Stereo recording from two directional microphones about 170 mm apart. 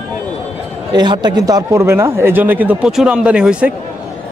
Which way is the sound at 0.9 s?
25° right (ahead or behind).